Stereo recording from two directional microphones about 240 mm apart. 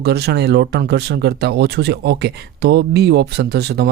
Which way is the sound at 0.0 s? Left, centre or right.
Right.